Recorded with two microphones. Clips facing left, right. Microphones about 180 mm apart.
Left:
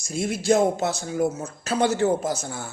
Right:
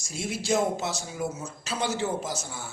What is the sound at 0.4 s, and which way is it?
A man's voice, 60° left (ahead or behind).